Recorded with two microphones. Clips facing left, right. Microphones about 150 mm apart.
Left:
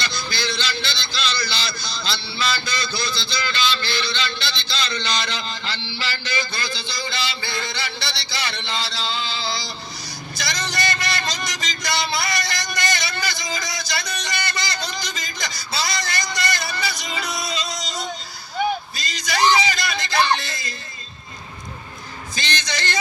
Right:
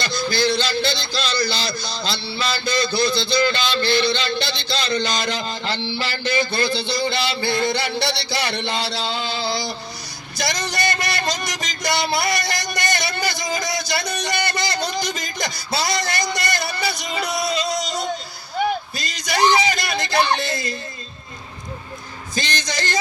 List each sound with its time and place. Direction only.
0.0 s a man's voice: 50° right (ahead or behind)
10.3 s a sound: 60° right (ahead or behind)
22.4 s a man's voice: 45° right (ahead or behind)